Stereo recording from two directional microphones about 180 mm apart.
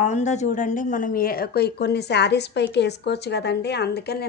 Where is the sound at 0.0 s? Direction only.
40° left (ahead or behind).